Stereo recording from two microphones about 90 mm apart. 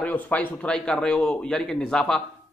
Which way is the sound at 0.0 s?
20° left (ahead or behind).